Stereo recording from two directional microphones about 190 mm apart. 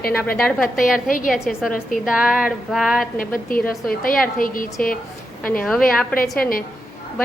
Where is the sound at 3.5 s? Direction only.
50° left (ahead or behind).